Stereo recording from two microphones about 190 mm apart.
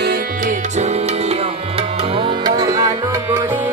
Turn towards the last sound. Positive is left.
turn(degrees=-20)  # may be behind; listen again after turning